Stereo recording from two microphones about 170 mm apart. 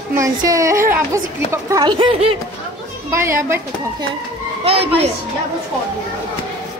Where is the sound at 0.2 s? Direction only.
20° right (ahead or behind).